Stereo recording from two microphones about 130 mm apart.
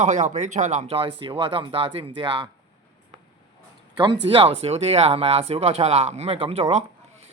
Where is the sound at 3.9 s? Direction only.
35° right (ahead or behind).